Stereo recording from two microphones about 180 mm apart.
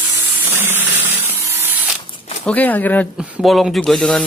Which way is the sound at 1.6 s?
10° right (ahead or behind).